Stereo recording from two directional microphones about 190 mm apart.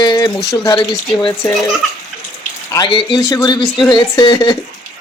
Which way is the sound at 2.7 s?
25° left (ahead or behind).